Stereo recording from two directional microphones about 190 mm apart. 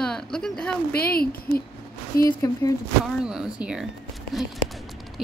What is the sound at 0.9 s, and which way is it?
Speech, 55° left (ahead or behind).